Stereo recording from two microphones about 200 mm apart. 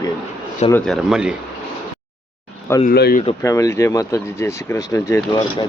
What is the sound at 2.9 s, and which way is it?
Speech, 50° left (ahead or behind).